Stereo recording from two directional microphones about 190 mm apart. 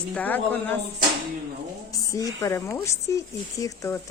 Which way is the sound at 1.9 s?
15° left (ahead or behind).